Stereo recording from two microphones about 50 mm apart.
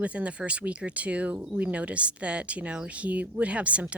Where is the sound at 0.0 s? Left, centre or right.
Right.